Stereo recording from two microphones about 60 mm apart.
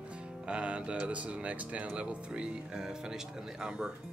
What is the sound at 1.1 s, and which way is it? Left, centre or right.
Speech, right.